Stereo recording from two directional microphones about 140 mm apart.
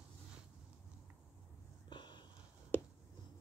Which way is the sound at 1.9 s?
35° left (ahead or behind).